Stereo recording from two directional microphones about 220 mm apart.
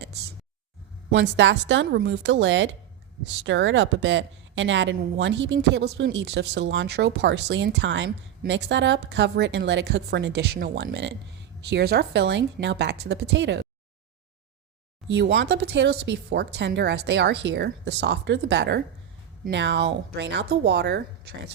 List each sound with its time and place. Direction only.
0.0 s a sound: 50° right (ahead or behind)
1.1 s a woman's voice: 55° right (ahead or behind)
15.0 s a woman's voice: 55° right (ahead or behind)